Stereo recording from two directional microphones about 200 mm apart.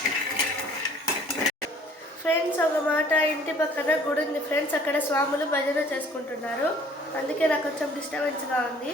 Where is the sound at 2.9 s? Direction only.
10° left (ahead or behind).